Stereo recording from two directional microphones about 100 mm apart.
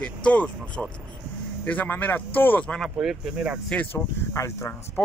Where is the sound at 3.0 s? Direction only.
5° right (ahead or behind).